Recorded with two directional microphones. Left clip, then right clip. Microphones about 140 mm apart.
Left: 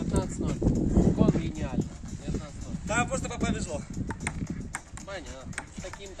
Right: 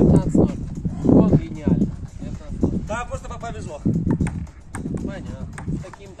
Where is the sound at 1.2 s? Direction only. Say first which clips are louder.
Right 6 dB; 45° right (ahead or behind).